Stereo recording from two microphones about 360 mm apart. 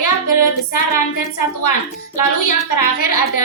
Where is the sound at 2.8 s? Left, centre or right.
Left.